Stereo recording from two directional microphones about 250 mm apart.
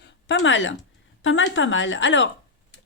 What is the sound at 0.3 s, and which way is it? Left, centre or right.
Speech, left.